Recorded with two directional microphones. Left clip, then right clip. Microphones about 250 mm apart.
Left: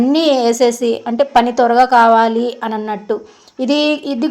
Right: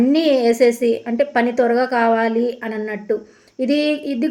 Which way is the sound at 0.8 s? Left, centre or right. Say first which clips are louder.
Left 1 dB; left.